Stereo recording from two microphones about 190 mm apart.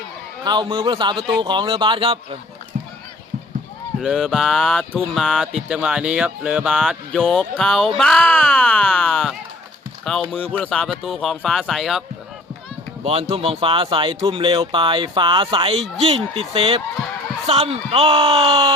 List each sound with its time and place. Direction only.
0.4 s speech: 25° right (ahead or behind)
4.0 s speech: centre (ahead or behind)
13.1 s speech: 30° right (ahead or behind)